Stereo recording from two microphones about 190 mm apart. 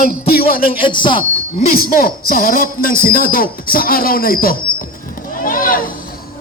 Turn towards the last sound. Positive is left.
turn(degrees=45)  # may be behind; listen again after turning